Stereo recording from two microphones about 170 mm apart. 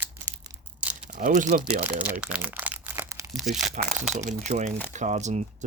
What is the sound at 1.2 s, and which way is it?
Speech, 50° right (ahead or behind).